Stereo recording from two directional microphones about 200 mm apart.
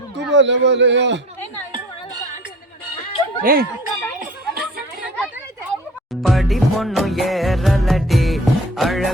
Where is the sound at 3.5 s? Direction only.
45° right (ahead or behind).